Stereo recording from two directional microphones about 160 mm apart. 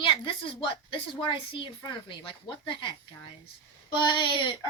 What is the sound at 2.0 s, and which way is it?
Speech, 30° left (ahead or behind).